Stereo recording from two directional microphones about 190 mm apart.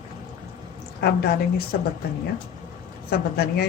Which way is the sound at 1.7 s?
60° left (ahead or behind).